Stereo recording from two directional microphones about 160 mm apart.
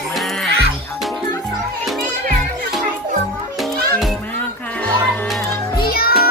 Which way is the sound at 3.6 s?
Centre (ahead or behind).